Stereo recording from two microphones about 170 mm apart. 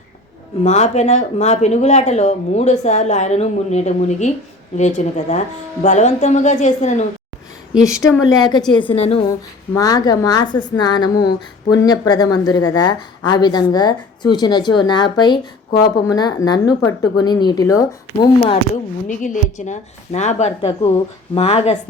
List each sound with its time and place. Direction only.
0.6 s a woman's voice: 40° left (ahead or behind)
7.9 s speech: 15° left (ahead or behind)
8.7 s speech: 30° left (ahead or behind)
9.7 s a woman's voice: 20° left (ahead or behind)
18.7 s a woman's voice: 50° left (ahead or behind)